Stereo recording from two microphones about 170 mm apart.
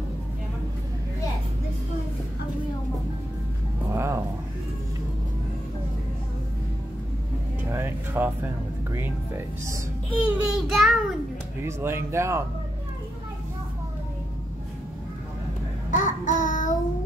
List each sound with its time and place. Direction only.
3.9 s a sound: 15° right (ahead or behind)
7.7 s music: 10° right (ahead or behind)
10.2 s a child's voice: centre (ahead or behind)
11.6 s speech: 15° right (ahead or behind)
15.9 s child singing: 50° left (ahead or behind)